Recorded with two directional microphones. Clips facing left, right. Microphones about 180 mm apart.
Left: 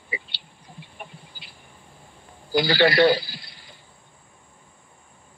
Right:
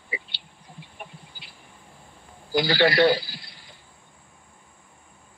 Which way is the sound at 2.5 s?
70° left (ahead or behind).